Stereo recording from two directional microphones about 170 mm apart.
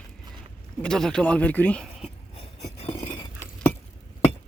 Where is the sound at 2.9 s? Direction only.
15° left (ahead or behind).